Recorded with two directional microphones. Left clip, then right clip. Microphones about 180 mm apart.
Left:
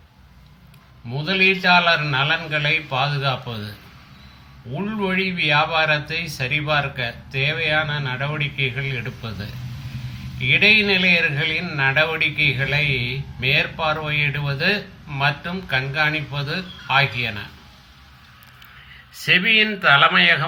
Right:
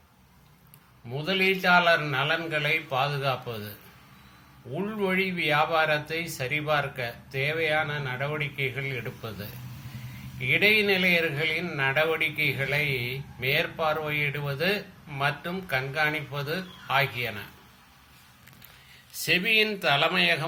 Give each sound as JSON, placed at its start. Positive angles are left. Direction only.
{"t": 1.1, "sound": "a man's voice", "side_deg": -15}
{"t": 4.7, "sound": "a man's voice", "side_deg": -15}
{"t": 19.2, "sound": "speech", "side_deg": -20}